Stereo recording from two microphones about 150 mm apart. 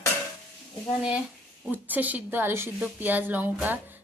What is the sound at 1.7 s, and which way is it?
A woman's voice, 10° right (ahead or behind).